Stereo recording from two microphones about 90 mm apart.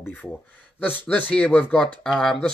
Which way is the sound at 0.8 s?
15° left (ahead or behind).